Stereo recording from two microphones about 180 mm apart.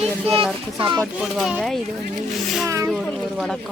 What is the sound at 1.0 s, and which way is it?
Speech, 5° right (ahead or behind).